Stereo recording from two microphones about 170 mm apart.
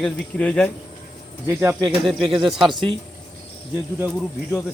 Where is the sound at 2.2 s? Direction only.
30° right (ahead or behind).